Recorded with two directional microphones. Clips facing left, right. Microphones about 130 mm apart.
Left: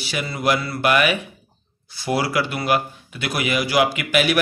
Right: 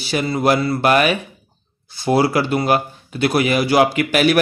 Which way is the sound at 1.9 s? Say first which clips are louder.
Right 6 dB; 25° right (ahead or behind).